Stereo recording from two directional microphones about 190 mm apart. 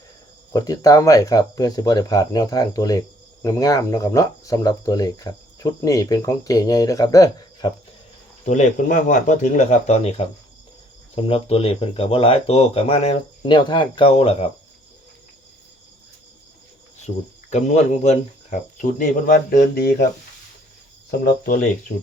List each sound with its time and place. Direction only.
0.5 s speech: 20° left (ahead or behind)
8.4 s speech: 40° left (ahead or behind)
17.1 s speech: 40° left (ahead or behind)
21.1 s speech: 50° left (ahead or behind)